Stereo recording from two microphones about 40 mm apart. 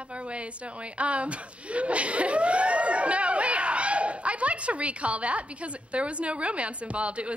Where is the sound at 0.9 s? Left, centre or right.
Right.